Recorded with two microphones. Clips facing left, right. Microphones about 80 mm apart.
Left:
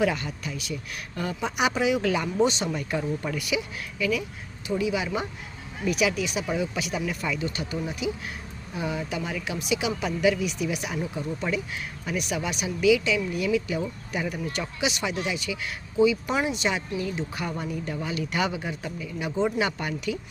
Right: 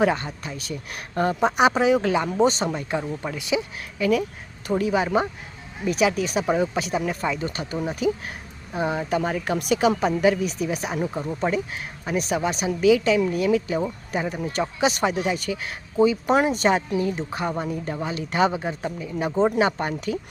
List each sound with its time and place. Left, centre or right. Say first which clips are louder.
0.0 s speech: right 4 dB; right
2.7 s speech: right 1 dB; right
3.4 s speech: right 4 dB; right
8.7 s speech: right 6 dB; right